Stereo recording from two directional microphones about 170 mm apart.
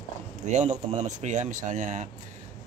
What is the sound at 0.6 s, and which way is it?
Speech, 45° right (ahead or behind).